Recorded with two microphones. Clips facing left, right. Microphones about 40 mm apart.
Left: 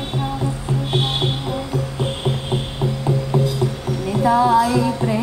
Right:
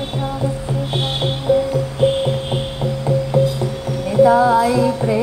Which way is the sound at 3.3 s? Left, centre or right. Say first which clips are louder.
Right 3 dB; centre.